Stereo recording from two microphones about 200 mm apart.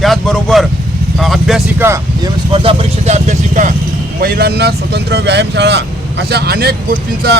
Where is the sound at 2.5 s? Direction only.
25° right (ahead or behind).